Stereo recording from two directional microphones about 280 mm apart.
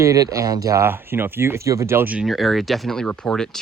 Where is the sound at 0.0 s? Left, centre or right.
Centre.